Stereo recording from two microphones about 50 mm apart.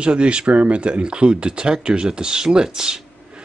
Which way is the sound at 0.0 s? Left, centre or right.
Right.